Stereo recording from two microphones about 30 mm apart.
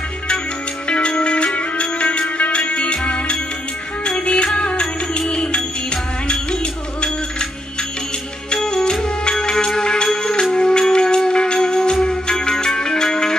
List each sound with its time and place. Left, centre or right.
0.8 s music: left
2.2 s music: left
2.5 s music: left
6.6 s music: left
8.6 s music: left